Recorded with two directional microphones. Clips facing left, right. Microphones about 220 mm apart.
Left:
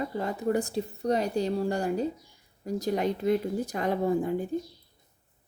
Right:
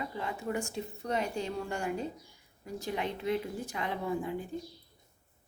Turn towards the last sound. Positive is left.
turn(degrees=45)  # may be behind; listen again after turning